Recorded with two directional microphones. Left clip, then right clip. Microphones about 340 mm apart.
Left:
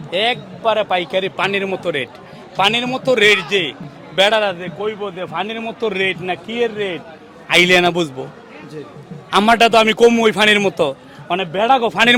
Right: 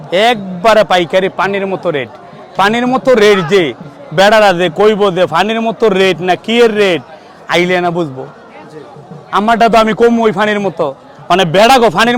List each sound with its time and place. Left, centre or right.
0.1 s a man's voice: right
1.4 s a man's voice: centre
2.6 s a man's voice: right
4.5 s a man's voice: right
7.6 s a man's voice: centre
9.3 s a man's voice: centre
11.3 s a man's voice: right